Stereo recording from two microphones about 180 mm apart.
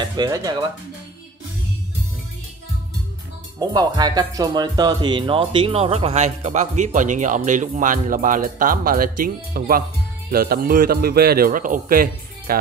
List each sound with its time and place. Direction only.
0.0 s speech: 20° right (ahead or behind)
3.5 s a man's voice: 20° right (ahead or behind); by 12.5 s 50° right (ahead or behind)